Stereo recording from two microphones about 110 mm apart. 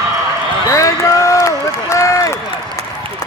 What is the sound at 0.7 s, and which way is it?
Run, 30° left (ahead or behind).